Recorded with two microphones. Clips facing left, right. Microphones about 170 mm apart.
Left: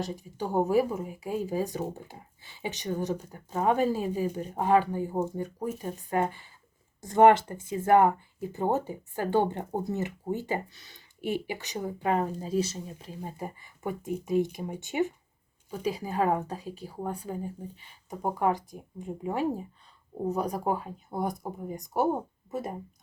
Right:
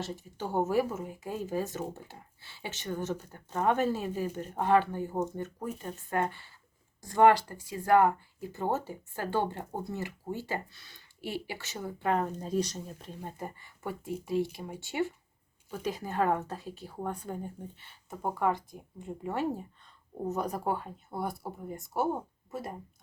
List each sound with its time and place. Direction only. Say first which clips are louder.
0.0 s speech: left 4 dB; 15° left (ahead or behind)